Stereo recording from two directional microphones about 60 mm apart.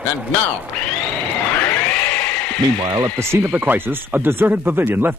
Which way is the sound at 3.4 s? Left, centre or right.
Right.